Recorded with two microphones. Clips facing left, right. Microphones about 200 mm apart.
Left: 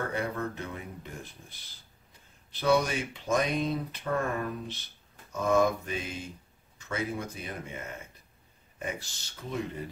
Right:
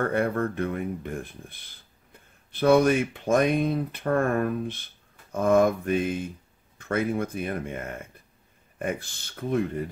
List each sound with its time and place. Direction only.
0.0 s speech: 55° right (ahead or behind)